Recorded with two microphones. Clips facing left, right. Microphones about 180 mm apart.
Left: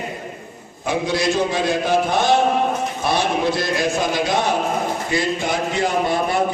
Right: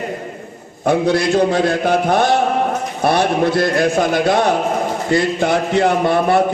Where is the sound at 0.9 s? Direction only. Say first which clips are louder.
Right 6 dB; 60° right (ahead or behind).